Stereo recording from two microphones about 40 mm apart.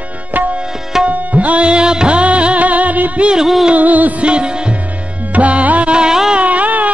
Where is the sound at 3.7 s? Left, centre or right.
Right.